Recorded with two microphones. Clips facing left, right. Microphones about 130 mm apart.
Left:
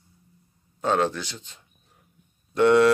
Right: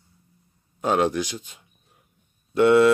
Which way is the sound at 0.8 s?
15° right (ahead or behind).